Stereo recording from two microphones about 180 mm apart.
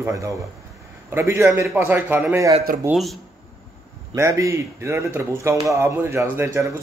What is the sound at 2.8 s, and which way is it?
Speech, centre (ahead or behind).